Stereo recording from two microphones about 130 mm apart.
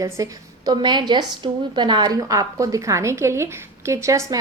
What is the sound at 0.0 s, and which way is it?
A woman's voice, 30° right (ahead or behind).